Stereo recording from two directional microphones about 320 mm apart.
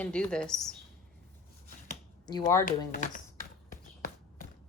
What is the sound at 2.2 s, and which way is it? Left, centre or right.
Speech, centre.